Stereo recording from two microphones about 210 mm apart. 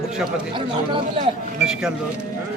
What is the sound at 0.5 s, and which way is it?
Speech, 25° right (ahead or behind).